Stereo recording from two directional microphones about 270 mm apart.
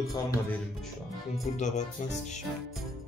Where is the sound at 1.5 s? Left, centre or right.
Left.